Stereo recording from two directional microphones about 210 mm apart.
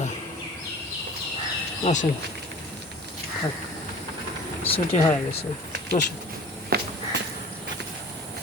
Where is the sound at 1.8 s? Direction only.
35° left (ahead or behind).